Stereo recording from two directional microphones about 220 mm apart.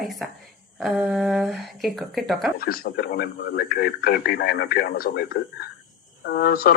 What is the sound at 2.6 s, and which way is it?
Speech, 45° left (ahead or behind).